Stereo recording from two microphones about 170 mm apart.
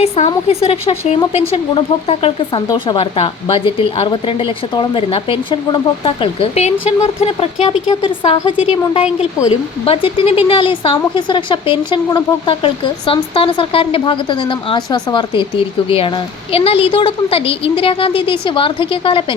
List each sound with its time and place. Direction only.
0.3 s speech: 35° left (ahead or behind)